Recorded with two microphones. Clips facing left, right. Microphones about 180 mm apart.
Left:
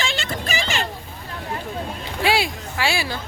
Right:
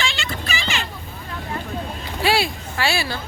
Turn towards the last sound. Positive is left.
turn(degrees=15)  # may be behind; listen again after turning